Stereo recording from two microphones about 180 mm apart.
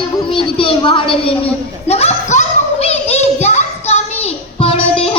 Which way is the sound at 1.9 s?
35° left (ahead or behind).